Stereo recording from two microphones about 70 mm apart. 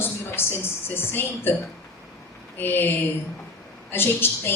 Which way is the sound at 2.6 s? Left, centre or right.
Left.